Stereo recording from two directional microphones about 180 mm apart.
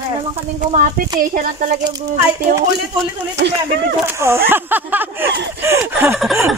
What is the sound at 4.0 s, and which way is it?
Speech, 15° right (ahead or behind).